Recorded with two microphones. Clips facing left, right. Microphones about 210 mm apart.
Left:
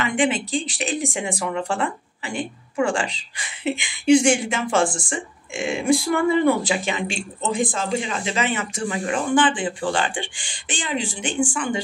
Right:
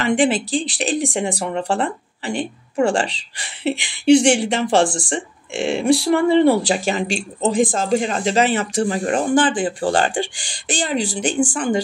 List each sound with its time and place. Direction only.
0.0 s speech: 35° right (ahead or behind)